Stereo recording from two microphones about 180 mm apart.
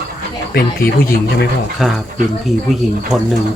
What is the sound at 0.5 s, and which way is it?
Speech, 55° left (ahead or behind).